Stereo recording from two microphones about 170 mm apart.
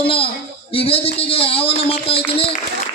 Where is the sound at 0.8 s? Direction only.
35° left (ahead or behind).